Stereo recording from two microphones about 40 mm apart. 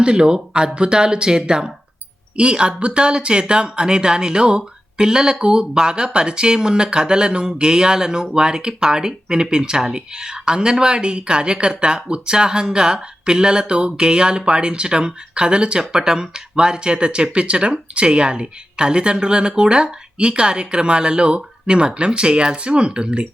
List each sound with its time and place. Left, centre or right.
0.0 s speech: right